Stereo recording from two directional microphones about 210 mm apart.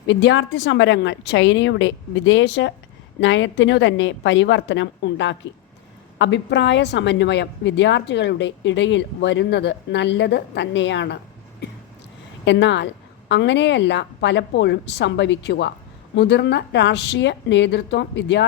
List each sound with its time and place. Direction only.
0.1 s a woman's voice: 60° left (ahead or behind)
12.5 s a woman's voice: 60° left (ahead or behind)